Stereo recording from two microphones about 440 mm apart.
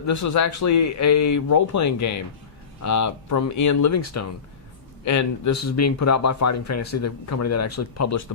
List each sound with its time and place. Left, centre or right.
0.0 s speech: left